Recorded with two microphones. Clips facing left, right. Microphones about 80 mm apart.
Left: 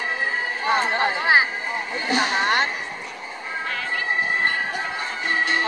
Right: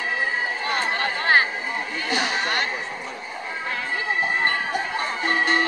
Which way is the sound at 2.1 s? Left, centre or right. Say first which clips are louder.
Left 4 dB; left.